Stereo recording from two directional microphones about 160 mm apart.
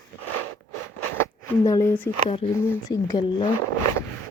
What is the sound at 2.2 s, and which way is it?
Speech, 35° left (ahead or behind).